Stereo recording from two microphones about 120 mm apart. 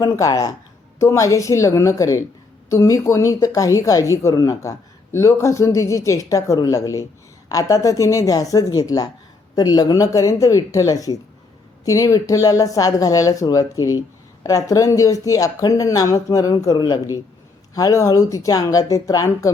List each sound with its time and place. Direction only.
0.0 s speech: 30° left (ahead or behind)